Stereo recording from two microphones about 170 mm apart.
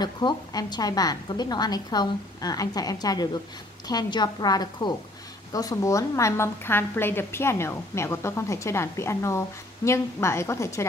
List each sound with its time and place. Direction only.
0.0 s a woman's voice: 25° left (ahead or behind)